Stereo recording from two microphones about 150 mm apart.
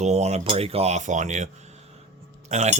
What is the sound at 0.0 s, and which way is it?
Speech, 45° right (ahead or behind).